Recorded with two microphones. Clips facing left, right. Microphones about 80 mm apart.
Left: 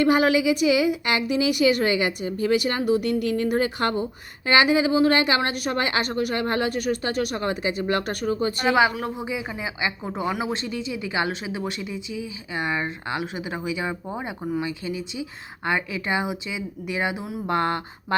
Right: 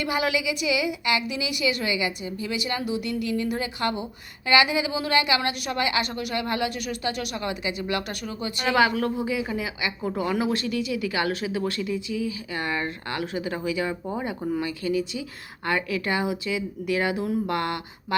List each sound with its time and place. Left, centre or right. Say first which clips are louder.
0.0 s a woman's voice: left 7 dB; left
8.7 s speech: right 2 dB; centre